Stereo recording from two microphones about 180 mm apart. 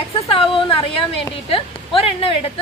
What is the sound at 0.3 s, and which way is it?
A woman's voice, 30° left (ahead or behind).